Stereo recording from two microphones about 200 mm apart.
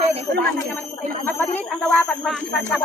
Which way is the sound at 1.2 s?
10° left (ahead or behind).